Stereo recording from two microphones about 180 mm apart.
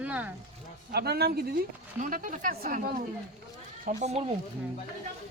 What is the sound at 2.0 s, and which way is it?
Speech, 50° right (ahead or behind).